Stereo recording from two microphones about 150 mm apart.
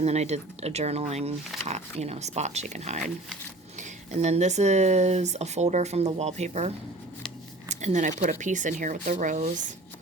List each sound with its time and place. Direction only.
0.0 s speech: 45° right (ahead or behind)